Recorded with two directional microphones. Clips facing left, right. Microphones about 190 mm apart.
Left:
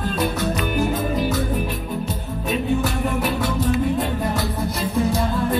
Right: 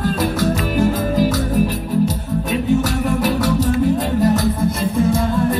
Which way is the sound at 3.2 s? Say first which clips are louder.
Right 5 dB; 90° right.